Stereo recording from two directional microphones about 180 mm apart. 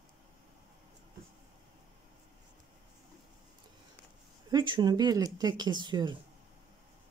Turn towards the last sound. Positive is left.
turn(degrees=-25)  # may be behind; listen again after turning